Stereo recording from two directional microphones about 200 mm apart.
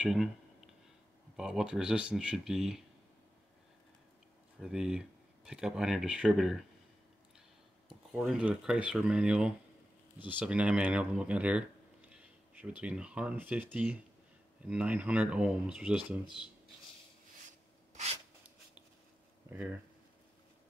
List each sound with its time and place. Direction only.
0.0 s speech: 5° right (ahead or behind)
1.3 s speech: 5° right (ahead or behind)
4.6 s speech: 5° right (ahead or behind)
7.9 s speech: 5° right (ahead or behind)
17.5 s rub: 35° right (ahead or behind)